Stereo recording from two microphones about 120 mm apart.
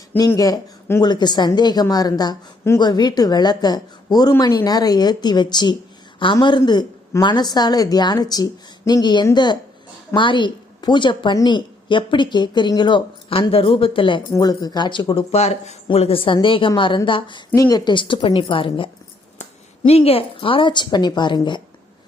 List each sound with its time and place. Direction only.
0.3 s a woman's voice: 30° left (ahead or behind); by 14.2 s 45° left (ahead or behind)
14.3 s a woman's voice: 35° left (ahead or behind)
15.1 s speech: 65° left (ahead or behind); by 17.4 s 45° left (ahead or behind)
17.5 s speech: 30° left (ahead or behind); by 18.9 s 45° left (ahead or behind)
19.4 s speech: 60° left (ahead or behind); by 21.6 s 40° left (ahead or behind)